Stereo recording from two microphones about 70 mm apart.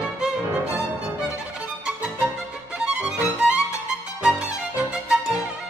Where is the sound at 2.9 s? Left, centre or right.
Centre.